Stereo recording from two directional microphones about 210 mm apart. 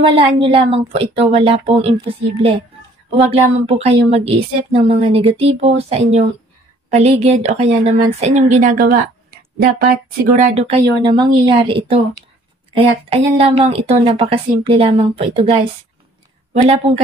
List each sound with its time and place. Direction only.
0.0 s a woman's voice: 25° right (ahead or behind)
3.6 s a woman's voice: 30° right (ahead or behind); by 10.3 s 45° right (ahead or behind)
10.3 s a woman's voice: 30° right (ahead or behind)
16.6 s a woman's voice: 30° right (ahead or behind)